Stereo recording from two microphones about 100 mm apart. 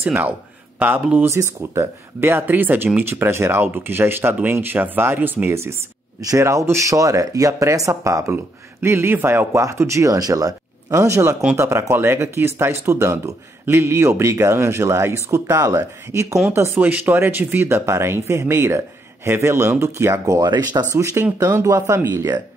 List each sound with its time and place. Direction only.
0.0 s speech: 15° right (ahead or behind); by 20.8 s 45° right (ahead or behind)
20.9 s speech: 30° right (ahead or behind)